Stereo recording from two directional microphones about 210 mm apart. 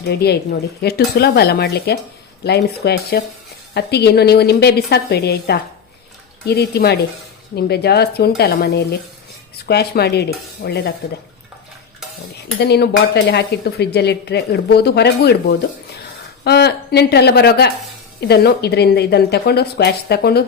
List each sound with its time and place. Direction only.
0.0 s speech: 50° left (ahead or behind)
12.6 s a woman's voice: 50° left (ahead or behind)